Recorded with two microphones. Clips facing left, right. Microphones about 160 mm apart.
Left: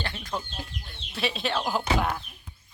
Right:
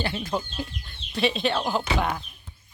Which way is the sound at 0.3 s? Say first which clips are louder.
Right 4 dB; 30° right (ahead or behind).